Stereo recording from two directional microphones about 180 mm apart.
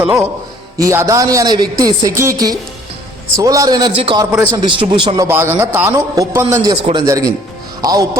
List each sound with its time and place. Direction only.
0.0 s a man's voice: 10° right (ahead or behind)